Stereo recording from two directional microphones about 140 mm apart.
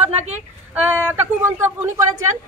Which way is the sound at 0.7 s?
15° right (ahead or behind).